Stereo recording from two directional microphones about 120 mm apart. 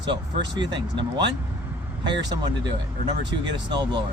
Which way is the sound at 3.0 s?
40° right (ahead or behind).